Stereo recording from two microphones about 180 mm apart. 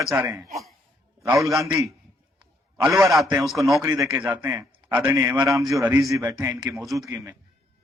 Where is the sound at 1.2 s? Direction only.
15° right (ahead or behind).